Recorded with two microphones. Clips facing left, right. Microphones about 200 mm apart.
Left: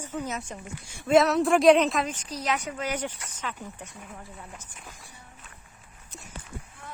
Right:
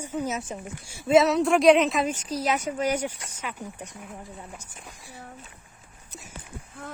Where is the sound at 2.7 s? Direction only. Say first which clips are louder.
Right 5 dB; 30° right (ahead or behind).